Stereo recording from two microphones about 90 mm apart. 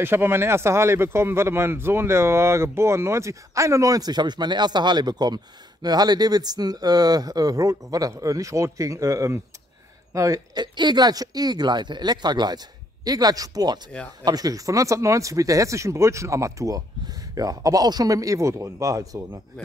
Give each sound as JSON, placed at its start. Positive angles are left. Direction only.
{"t": 0.0, "sound": "speech", "side_deg": -25}
{"t": 10.6, "sound": "speech", "side_deg": -55}